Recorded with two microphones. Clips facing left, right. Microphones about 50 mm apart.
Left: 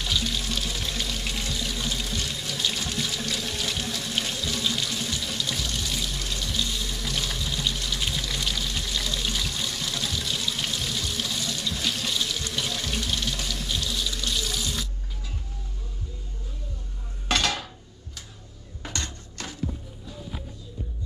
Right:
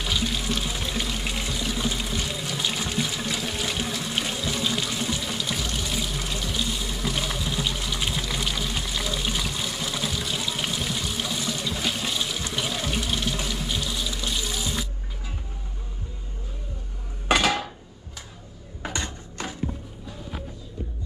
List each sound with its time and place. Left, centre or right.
0.0 s water: centre
17.3 s dishes: centre
18.8 s a sound: centre